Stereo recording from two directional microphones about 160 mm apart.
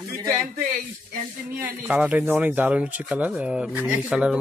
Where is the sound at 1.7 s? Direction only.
10° right (ahead or behind).